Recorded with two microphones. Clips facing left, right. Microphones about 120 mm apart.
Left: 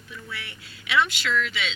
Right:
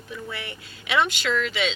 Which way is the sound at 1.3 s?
45° right (ahead or behind).